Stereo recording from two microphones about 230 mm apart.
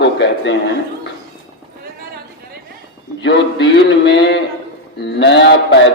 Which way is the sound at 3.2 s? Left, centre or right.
Left.